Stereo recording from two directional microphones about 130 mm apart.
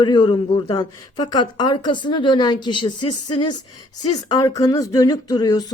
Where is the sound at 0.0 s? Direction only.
35° left (ahead or behind).